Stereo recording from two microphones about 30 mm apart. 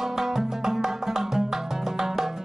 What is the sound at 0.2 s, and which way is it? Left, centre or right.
Music, centre.